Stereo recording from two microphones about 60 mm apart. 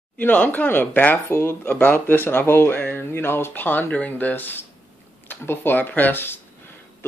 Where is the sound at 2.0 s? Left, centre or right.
Left.